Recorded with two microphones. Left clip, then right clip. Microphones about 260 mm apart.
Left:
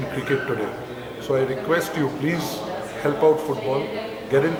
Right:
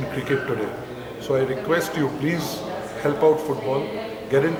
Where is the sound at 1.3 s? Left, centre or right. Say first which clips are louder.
Even; centre.